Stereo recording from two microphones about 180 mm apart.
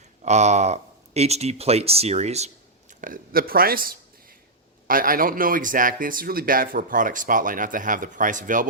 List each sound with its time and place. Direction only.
0.3 s speech: 40° right (ahead or behind)
3.0 s speech: 50° right (ahead or behind)